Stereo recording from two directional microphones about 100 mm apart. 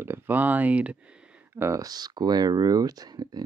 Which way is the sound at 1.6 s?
35° right (ahead or behind).